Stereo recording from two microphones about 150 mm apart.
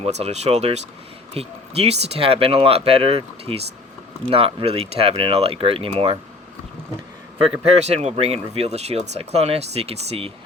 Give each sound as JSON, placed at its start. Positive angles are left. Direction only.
{"t": 0.0, "sound": "speech", "side_deg": -45}
{"t": 7.6, "sound": "speech", "side_deg": -45}